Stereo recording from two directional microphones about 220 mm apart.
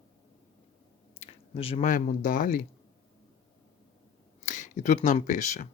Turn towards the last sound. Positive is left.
turn(degrees=35)  # may be behind; listen again after turning